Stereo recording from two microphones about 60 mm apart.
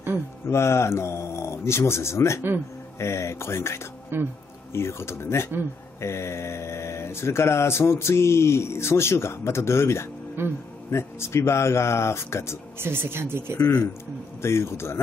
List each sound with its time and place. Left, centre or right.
0.5 s speech: left
4.1 s speech: right
4.7 s speech: left
10.4 s speech: right
10.9 s speech: left
12.7 s speech: right
14.4 s speech: left